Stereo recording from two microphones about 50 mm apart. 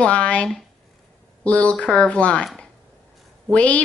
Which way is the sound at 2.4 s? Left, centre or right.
Centre.